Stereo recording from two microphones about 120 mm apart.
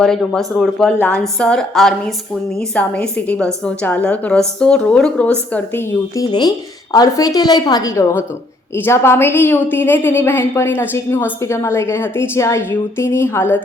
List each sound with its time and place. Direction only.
0.0 s a woman's voice: 5° left (ahead or behind)
6.9 s a woman's voice: 30° left (ahead or behind)